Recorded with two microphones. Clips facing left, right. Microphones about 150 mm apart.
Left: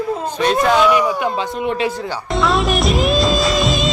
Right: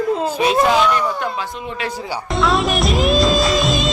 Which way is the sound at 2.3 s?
Centre (ahead or behind).